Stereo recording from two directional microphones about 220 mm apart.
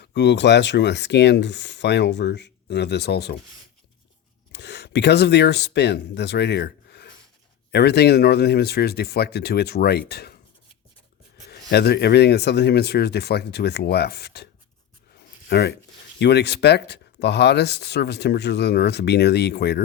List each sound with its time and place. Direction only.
0.0 s speech: 50° left (ahead or behind)
4.5 s speech: 50° left (ahead or behind)
11.4 s speech: 50° left (ahead or behind)
15.4 s speech: 50° left (ahead or behind)